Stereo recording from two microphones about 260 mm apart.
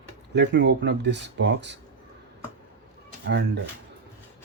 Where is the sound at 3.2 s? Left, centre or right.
Right.